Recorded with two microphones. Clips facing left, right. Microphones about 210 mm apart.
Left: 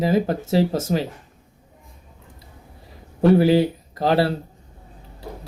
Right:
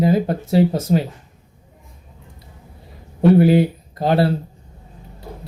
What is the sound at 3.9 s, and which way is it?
Speech, 25° right (ahead or behind).